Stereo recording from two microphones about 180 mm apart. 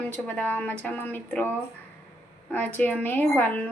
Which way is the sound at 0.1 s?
10° left (ahead or behind).